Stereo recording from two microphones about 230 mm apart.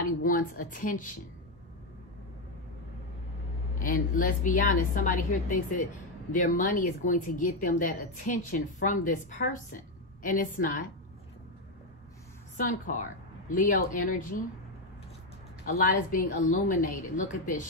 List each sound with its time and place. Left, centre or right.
0.2 s a woman's voice: left
3.8 s a woman's voice: left
12.5 s a woman's voice: left
15.6 s a woman's voice: left